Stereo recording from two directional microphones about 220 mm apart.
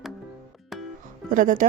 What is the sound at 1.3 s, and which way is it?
Speech, 35° right (ahead or behind).